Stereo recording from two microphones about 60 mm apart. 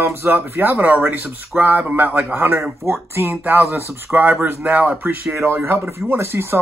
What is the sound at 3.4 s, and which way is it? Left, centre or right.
A man's voice, right.